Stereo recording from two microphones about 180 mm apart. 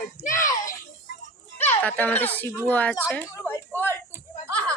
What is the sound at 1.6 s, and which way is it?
A woman's voice, 10° left (ahead or behind).